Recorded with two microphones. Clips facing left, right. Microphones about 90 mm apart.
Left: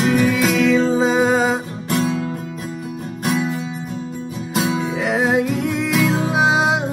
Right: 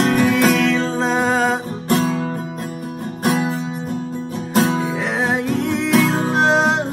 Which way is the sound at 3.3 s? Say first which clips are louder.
Right 2 dB; 55° right (ahead or behind).